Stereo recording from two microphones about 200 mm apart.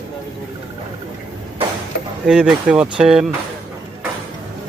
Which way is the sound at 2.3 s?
5° right (ahead or behind).